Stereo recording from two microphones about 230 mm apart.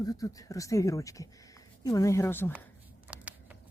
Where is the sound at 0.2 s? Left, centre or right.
Centre.